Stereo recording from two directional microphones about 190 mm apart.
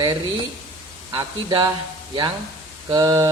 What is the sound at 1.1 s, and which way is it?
Speech, 25° right (ahead or behind).